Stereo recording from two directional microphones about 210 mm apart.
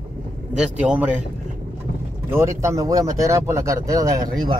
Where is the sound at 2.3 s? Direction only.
10° right (ahead or behind).